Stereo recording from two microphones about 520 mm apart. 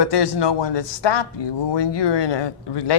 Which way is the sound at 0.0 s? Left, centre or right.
Left.